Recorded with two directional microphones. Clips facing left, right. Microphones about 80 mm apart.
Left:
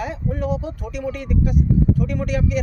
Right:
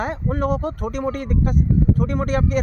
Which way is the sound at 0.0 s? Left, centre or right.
Right.